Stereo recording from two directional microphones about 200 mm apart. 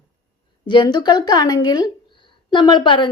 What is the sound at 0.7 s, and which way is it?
A woman's voice, 20° left (ahead or behind).